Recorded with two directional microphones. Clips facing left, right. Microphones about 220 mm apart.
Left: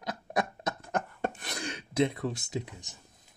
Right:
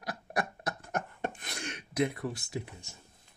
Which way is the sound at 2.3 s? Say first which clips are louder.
Left 3 dB; 20° left (ahead or behind).